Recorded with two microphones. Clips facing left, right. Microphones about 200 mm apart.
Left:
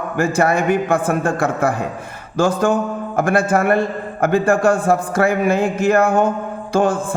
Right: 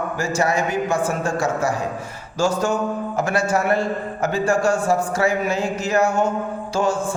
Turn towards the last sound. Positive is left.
turn(degrees=55)  # may be behind; listen again after turning